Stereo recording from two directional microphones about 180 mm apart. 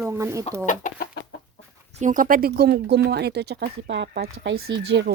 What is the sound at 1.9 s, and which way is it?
Speech, 45° right (ahead or behind).